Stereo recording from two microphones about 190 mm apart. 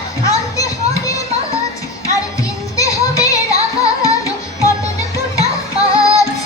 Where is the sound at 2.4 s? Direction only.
15° left (ahead or behind).